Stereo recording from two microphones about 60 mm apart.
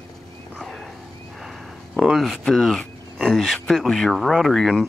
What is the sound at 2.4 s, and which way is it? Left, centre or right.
Speech, centre.